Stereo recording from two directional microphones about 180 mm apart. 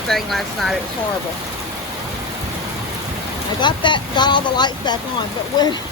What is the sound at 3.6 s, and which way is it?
Speech, 25° left (ahead or behind).